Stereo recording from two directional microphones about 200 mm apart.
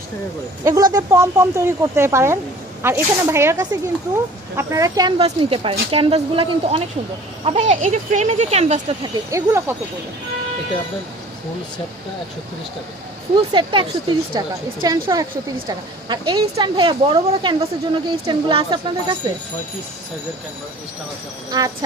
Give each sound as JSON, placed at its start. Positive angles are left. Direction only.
{"t": 0.6, "sound": "a woman's voice", "side_deg": -20}
{"t": 9.3, "sound": "speech", "side_deg": -15}
{"t": 13.3, "sound": "a woman's voice", "side_deg": -25}
{"t": 21.5, "sound": "a woman's voice", "side_deg": -20}